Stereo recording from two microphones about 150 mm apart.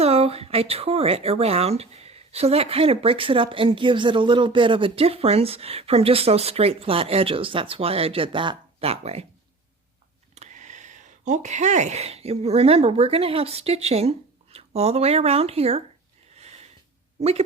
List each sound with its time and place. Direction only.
0.0 s speech: 45° right (ahead or behind)
10.3 s speech: 50° right (ahead or behind)
17.2 s speech: 45° right (ahead or behind)